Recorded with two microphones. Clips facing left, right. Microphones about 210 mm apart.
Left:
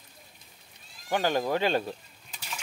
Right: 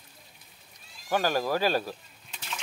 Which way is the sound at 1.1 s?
20° left (ahead or behind).